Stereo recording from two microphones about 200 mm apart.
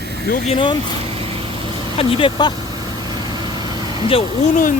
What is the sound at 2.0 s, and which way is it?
Speech, 25° left (ahead or behind).